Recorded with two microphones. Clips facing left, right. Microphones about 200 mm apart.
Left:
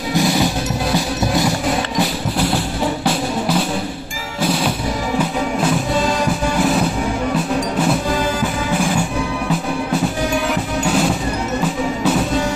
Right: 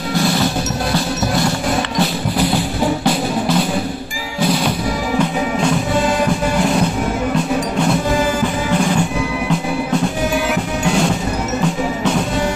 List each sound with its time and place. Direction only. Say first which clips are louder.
0.1 s music: left 1 dB; 15° left (ahead or behind)
3.1 s music: right 2 dB; 5° left (ahead or behind)
5.2 s music: right 2 dB; 5° left (ahead or behind)
10.5 s music: right 1 dB; centre (ahead or behind)